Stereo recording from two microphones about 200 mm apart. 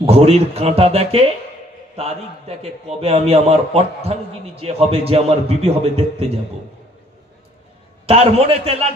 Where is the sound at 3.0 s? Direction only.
30° right (ahead or behind).